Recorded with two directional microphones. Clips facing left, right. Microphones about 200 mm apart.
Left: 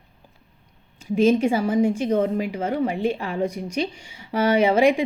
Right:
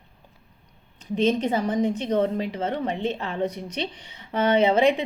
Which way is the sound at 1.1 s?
10° left (ahead or behind).